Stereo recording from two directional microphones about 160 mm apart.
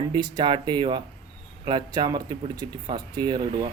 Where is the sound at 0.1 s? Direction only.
30° right (ahead or behind).